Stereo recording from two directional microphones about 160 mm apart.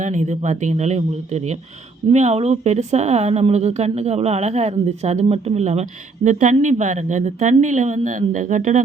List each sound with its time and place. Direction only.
0.0 s speech: 50° right (ahead or behind)